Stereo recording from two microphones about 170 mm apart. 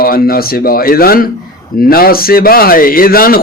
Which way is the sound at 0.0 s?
60° left (ahead or behind).